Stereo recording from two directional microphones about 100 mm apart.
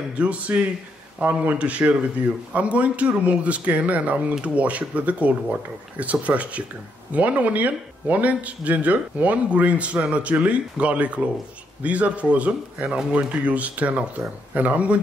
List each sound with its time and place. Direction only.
0.2 s a man's voice: 15° right (ahead or behind)